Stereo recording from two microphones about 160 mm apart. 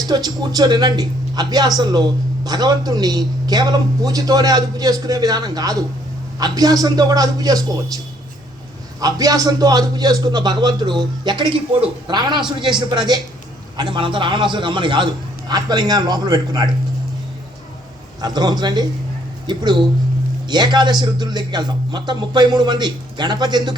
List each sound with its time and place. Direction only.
0.1 s speech: 25° right (ahead or behind)
9.0 s speech: 25° right (ahead or behind)
18.2 s speech: 25° right (ahead or behind)
20.5 s speech: 25° right (ahead or behind)